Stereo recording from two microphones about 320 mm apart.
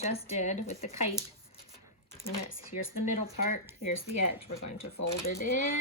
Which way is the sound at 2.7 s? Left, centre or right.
Left.